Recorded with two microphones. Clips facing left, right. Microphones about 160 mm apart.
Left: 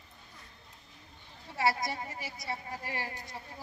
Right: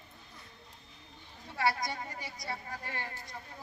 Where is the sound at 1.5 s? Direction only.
25° left (ahead or behind).